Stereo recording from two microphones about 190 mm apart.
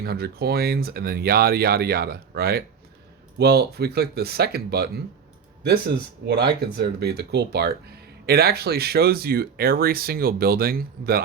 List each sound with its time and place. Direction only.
0.0 s speech: 55° right (ahead or behind)
6.2 s speech: 60° right (ahead or behind)